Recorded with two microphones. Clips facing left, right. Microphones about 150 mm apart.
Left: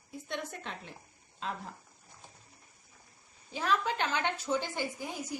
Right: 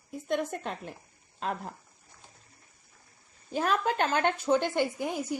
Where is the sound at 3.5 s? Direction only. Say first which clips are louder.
Right 4 dB; 50° right (ahead or behind).